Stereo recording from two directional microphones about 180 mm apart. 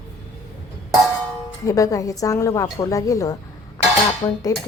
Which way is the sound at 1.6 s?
20° left (ahead or behind).